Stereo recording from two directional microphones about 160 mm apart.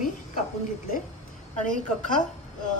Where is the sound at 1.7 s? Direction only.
55° left (ahead or behind).